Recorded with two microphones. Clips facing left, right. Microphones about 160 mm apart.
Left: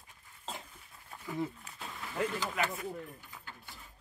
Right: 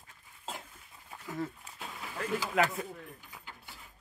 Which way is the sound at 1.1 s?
10° right (ahead or behind).